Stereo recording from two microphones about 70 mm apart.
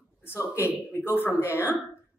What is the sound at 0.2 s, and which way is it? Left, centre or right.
A man's voice, left.